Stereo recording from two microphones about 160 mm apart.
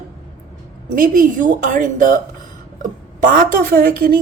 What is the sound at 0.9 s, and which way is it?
A woman's voice, 60° right (ahead or behind).